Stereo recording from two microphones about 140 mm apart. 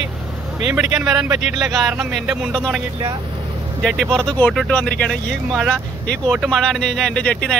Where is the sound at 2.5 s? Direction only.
5° left (ahead or behind).